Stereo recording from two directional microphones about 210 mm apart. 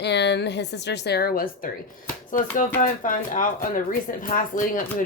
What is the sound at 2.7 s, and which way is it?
Speech, 40° left (ahead or behind).